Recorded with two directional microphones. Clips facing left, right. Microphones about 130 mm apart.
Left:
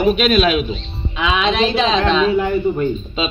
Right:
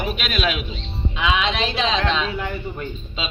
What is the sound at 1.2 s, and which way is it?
Speech, 45° left (ahead or behind).